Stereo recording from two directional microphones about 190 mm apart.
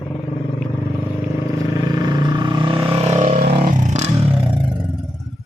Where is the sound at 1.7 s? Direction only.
20° right (ahead or behind); by 4.5 s 35° right (ahead or behind).